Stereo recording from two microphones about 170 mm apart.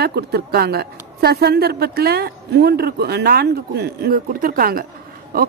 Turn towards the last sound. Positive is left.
turn(degrees=-60)  # may be behind; listen again after turning